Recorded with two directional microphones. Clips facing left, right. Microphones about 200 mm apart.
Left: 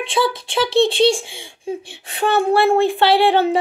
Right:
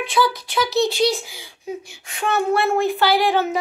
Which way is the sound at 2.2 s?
30° left (ahead or behind).